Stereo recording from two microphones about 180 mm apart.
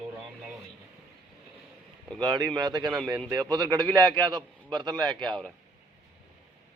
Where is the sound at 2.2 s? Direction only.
25° right (ahead or behind).